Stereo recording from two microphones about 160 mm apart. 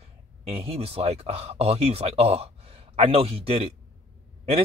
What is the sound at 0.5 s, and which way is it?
Speech, 40° right (ahead or behind).